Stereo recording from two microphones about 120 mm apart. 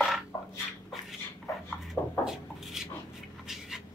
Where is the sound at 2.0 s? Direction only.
25° left (ahead or behind).